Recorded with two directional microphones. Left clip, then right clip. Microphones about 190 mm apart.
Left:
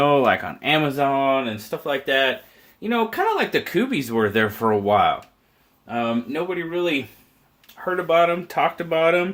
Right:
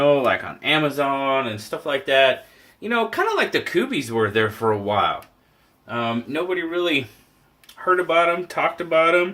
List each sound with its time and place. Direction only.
0.0 s speech: 55° left (ahead or behind)
5.9 s speech: 40° left (ahead or behind)
7.9 s speech: 45° left (ahead or behind)